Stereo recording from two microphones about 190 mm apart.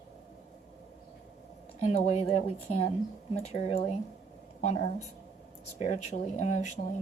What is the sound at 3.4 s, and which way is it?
Speech, 35° left (ahead or behind).